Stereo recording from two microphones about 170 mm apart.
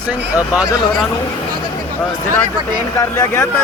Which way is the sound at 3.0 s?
20° left (ahead or behind).